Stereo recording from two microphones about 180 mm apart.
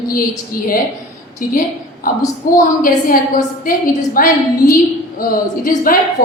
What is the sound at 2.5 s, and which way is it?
A woman's voice, 50° left (ahead or behind).